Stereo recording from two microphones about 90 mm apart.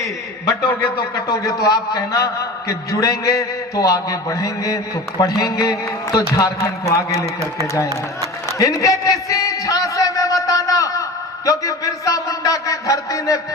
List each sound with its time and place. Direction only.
1.1 s a man's voice: 45° left (ahead or behind)
8.5 s a sound: 40° left (ahead or behind)
11.4 s a man's voice: 40° left (ahead or behind)